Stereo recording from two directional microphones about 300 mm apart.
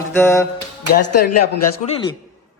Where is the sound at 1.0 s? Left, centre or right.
Left.